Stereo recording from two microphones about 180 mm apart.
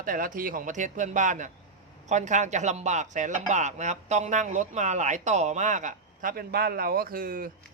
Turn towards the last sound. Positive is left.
turn(degrees=-50)  # may be behind; listen again after turning